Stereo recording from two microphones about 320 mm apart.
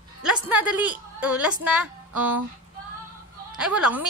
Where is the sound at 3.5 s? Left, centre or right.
Centre.